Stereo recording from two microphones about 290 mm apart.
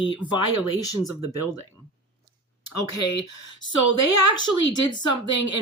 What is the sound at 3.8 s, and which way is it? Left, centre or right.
Speech, left.